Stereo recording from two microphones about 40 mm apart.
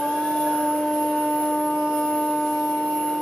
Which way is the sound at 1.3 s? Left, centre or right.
Centre.